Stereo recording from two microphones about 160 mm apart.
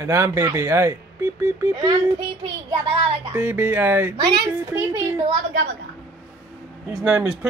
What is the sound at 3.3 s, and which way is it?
Speech, 15° right (ahead or behind).